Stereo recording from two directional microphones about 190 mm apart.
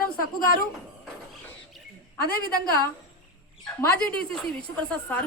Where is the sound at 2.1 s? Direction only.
50° left (ahead or behind).